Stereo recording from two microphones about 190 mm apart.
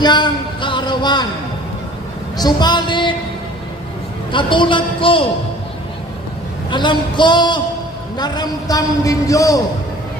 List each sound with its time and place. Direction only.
0.0 s speech: 25° left (ahead or behind)
2.4 s a man's voice: 20° left (ahead or behind)
4.3 s a man's voice: 25° left (ahead or behind)
6.7 s a man's voice: 25° left (ahead or behind)